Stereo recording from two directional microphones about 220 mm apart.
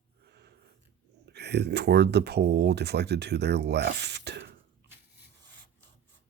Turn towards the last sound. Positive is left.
turn(degrees=-50)  # may be behind; listen again after turning